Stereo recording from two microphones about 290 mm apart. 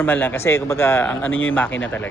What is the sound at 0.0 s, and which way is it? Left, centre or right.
Speech, centre.